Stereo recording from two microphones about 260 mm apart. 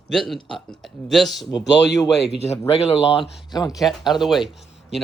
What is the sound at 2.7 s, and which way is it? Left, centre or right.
Speech, left.